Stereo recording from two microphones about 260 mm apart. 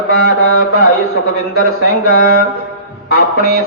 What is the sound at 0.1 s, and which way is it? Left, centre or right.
Music, left.